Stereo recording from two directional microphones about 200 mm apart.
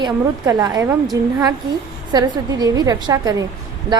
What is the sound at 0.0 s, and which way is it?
A woman's voice, 20° right (ahead or behind).